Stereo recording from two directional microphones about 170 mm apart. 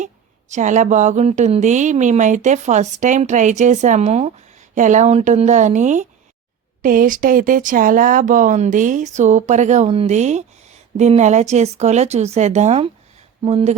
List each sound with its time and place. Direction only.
0.0 s speech: 45° right (ahead or behind)